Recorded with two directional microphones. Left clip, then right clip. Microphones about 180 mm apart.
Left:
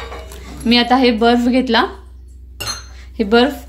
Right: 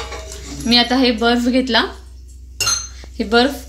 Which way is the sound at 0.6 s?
60° left (ahead or behind).